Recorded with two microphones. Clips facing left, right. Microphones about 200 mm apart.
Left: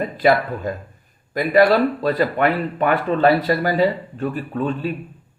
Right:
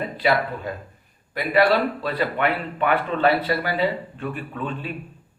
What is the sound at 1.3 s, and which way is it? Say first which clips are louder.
Speech: left 4 dB; 45° left (ahead or behind).